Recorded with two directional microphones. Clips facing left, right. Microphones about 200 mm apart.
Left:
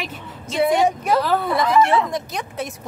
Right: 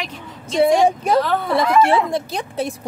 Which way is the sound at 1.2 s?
Centre (ahead or behind).